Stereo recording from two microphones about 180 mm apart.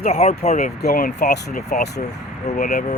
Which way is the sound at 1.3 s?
65° left (ahead or behind).